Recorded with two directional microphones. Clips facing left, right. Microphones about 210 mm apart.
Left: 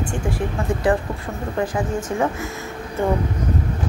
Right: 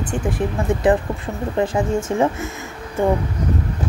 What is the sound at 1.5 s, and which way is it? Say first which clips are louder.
Speech: right 4 dB; 25° right (ahead or behind).